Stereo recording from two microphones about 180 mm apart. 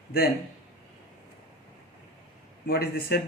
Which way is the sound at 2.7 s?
60° left (ahead or behind).